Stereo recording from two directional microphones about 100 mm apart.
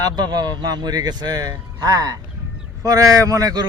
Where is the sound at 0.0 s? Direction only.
40° right (ahead or behind).